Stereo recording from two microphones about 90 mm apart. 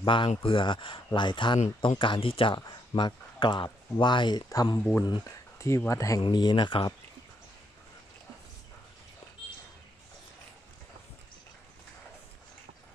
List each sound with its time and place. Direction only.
0.0 s speech: 70° left (ahead or behind)
4.5 s speech: 40° left (ahead or behind)
6.2 s speech: 60° left (ahead or behind)